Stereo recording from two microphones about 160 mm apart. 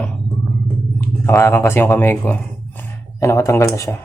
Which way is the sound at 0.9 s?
15° left (ahead or behind).